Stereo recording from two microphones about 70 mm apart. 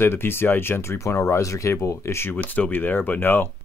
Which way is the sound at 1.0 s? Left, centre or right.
Left.